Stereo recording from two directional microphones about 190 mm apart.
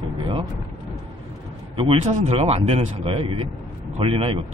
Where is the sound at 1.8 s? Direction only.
35° right (ahead or behind).